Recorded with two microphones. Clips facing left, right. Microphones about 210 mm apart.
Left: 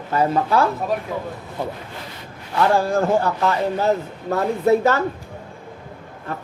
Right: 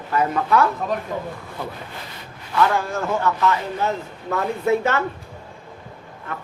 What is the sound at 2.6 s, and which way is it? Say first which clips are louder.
A man's voice: left 3 dB; 35° left (ahead or behind).